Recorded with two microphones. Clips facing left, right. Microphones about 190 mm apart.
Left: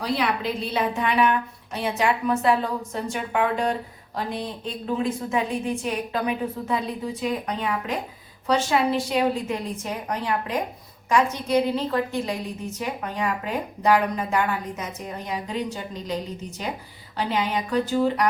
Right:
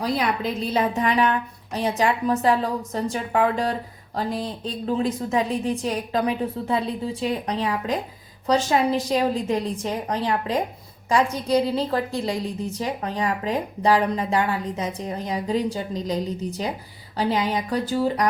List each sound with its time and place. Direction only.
0.0 s speech: 45° right (ahead or behind)